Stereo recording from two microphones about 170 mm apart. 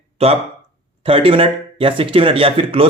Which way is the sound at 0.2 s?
35° right (ahead or behind).